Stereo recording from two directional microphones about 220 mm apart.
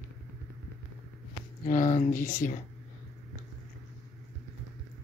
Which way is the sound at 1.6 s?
35° left (ahead or behind).